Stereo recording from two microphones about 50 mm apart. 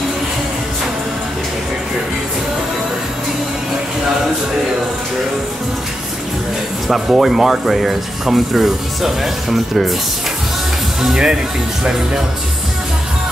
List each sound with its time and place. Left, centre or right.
6.9 s speech: centre
11.0 s speech: centre